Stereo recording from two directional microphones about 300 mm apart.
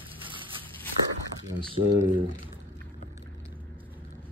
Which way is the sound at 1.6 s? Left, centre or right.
Centre.